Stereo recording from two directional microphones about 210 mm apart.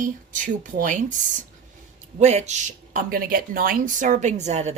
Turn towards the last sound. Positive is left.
turn(degrees=-30)  # may be behind; listen again after turning